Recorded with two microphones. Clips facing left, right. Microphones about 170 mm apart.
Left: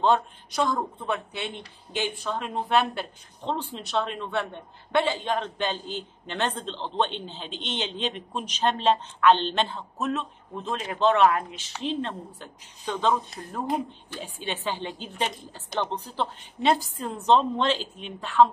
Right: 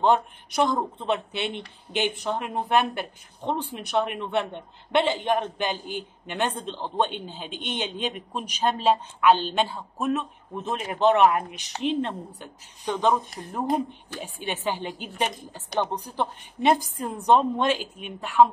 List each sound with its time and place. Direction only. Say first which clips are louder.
0.0 s a man's voice: right 1 dB; 20° right (ahead or behind)